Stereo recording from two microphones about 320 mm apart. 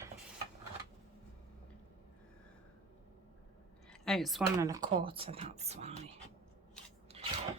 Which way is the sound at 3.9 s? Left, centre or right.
Centre.